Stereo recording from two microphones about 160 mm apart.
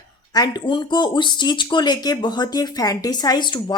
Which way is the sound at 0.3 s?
25° left (ahead or behind).